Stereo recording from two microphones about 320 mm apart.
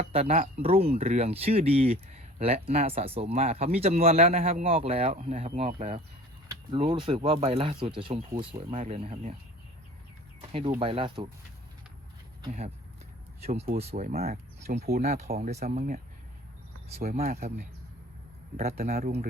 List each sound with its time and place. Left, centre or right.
0.0 s speech: centre
10.8 s speech: centre
12.4 s speech: centre
17.0 s speech: right